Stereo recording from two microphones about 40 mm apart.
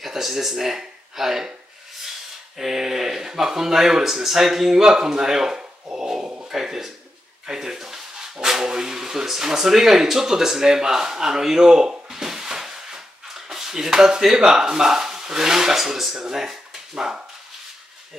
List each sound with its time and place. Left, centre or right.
0.0 s speech: centre
2.5 s speech: centre
6.2 s a sound: right
6.5 s speech: centre